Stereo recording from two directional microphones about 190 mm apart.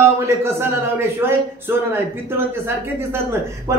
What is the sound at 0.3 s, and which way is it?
Speech, 15° right (ahead or behind).